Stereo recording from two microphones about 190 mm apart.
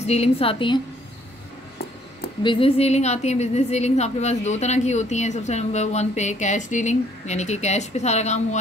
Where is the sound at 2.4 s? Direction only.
25° left (ahead or behind).